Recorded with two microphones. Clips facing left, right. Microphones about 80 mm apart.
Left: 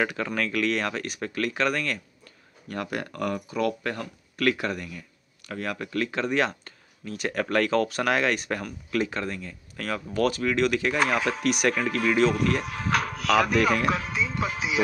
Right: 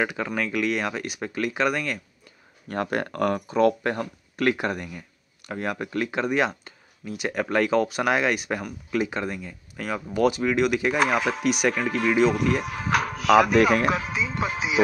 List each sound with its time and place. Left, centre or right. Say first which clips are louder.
0.0 s speech: right 1 dB; centre
2.7 s speech: right 5 dB; right; by 14.8 s centre